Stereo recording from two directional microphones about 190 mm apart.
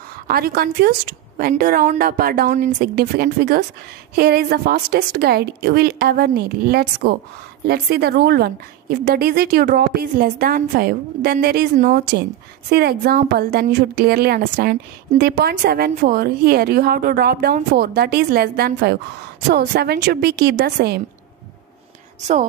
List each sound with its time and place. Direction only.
0.3 s a woman's voice: 55° right (ahead or behind)